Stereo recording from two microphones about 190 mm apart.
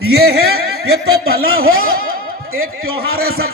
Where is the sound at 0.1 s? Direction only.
55° right (ahead or behind).